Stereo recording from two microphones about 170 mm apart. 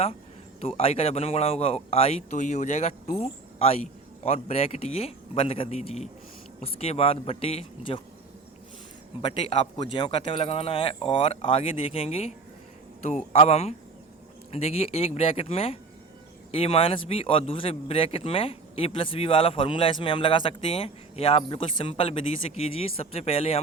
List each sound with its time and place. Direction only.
0.6 s a man's voice: 35° left (ahead or behind)
9.2 s a man's voice: 30° left (ahead or behind)